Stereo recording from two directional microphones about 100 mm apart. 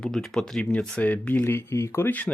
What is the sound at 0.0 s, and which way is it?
Speech, 5° left (ahead or behind).